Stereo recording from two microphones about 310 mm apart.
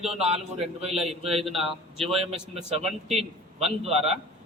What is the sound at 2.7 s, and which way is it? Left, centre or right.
A man's voice, centre.